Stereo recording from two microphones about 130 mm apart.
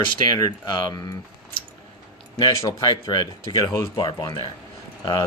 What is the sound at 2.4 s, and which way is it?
Speech, 35° left (ahead or behind).